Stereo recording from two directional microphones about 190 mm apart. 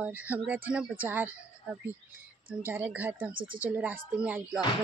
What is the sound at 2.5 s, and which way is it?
Speech, 10° right (ahead or behind).